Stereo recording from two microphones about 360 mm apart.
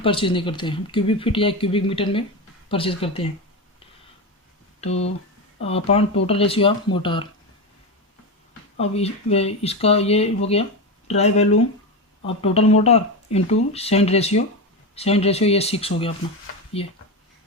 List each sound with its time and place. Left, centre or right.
0.0 s speech: centre
5.5 s speech: centre
8.8 s speech: centre